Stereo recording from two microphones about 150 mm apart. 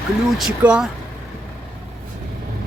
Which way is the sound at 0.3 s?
5° right (ahead or behind).